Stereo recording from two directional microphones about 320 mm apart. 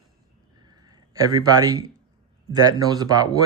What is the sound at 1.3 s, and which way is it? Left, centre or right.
Speech, centre.